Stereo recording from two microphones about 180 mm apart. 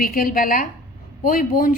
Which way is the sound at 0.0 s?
50° left (ahead or behind).